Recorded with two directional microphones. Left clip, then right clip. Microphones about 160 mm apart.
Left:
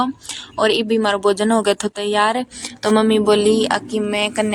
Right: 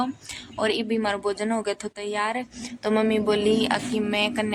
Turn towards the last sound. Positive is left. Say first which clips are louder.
# left 5 dB
turn(degrees=30)  # may be behind; listen again after turning